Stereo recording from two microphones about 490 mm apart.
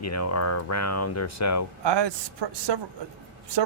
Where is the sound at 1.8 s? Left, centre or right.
Right.